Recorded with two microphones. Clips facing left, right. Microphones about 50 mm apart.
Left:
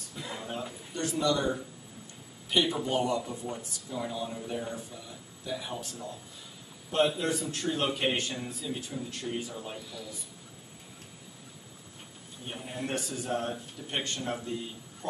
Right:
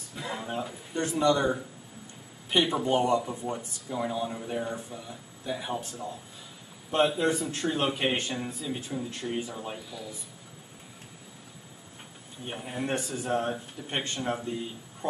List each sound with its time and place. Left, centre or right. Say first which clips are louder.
0.2 s a sound: right 4 dB; centre
0.9 s a man's voice: right 4 dB; right
12.4 s a man's voice: right 4 dB; centre